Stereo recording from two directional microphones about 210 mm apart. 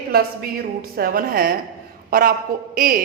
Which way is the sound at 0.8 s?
45° right (ahead or behind).